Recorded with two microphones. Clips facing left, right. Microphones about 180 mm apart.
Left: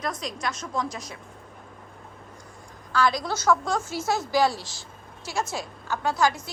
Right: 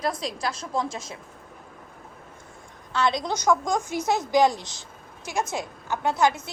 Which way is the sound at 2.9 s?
20° right (ahead or behind).